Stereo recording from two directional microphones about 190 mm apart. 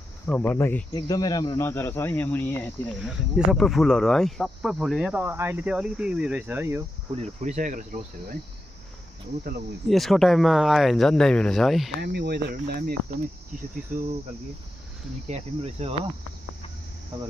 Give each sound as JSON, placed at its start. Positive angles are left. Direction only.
{"t": 0.3, "sound": "speech", "side_deg": 10}
{"t": 3.1, "sound": "speech", "side_deg": 0}
{"t": 7.2, "sound": "cricket", "side_deg": -40}
{"t": 9.8, "sound": "speech", "side_deg": 0}
{"t": 12.0, "sound": "speech", "side_deg": -60}
{"t": 13.9, "sound": "cricket", "side_deg": -40}
{"t": 15.2, "sound": "cricket", "side_deg": -35}